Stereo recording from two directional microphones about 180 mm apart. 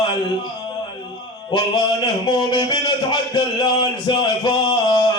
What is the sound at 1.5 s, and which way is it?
Speech, 25° left (ahead or behind).